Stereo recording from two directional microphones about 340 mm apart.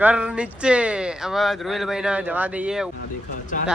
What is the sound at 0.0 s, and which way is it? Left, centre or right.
Speech, centre.